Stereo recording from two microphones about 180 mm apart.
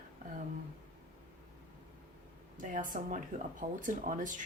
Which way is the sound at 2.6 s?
50° right (ahead or behind).